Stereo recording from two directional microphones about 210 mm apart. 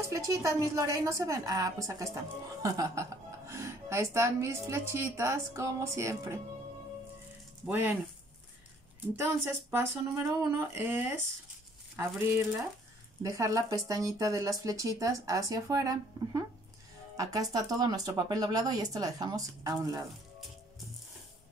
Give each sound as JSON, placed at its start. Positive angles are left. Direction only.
{"t": 0.0, "sound": "a woman's voice", "side_deg": -15}
{"t": 7.6, "sound": "a woman's voice", "side_deg": -10}
{"t": 9.1, "sound": "a woman's voice", "side_deg": -10}
{"t": 13.2, "sound": "a woman's voice", "side_deg": -15}